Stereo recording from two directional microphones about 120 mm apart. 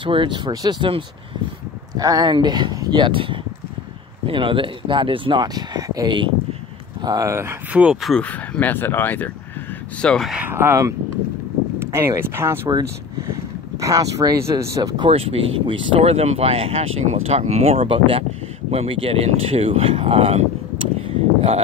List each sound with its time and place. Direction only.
0.0 s speech: 45° right (ahead or behind)
2.0 s speech: 30° right (ahead or behind); by 8.0 s 10° right (ahead or behind)
8.0 s speech: centre (ahead or behind)
8.3 s speech: 15° left (ahead or behind)
10.0 s speech: 5° left (ahead or behind)
10.3 s speech: 15° right (ahead or behind); by 15.0 s 30° right (ahead or behind)
15.0 s speech: 55° right (ahead or behind)
16.0 s speech: 60° right (ahead or behind)
21.0 s a sound: 55° right (ahead or behind)